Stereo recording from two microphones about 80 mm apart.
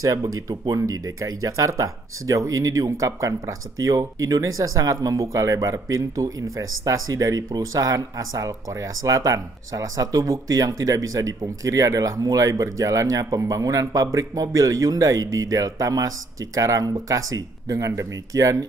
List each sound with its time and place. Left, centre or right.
0.0 s speech: right